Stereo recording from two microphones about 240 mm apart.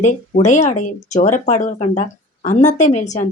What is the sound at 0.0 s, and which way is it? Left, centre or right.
Speech, left.